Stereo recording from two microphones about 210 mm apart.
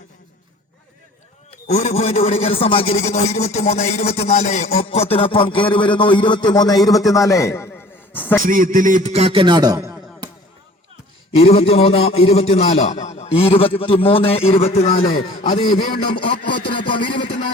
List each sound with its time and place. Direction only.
1.5 s a man's voice: 30° left (ahead or behind); by 7.7 s 15° left (ahead or behind)
8.1 s a sound: 10° left (ahead or behind)
8.4 s a man's voice: 40° right (ahead or behind); by 10.2 s 15° right (ahead or behind)
11.3 s a man's voice: 30° left (ahead or behind)
15.7 s a man's voice: 45° left (ahead or behind)
16.0 s speech: 90° left
16.5 s a man's voice: 25° left (ahead or behind)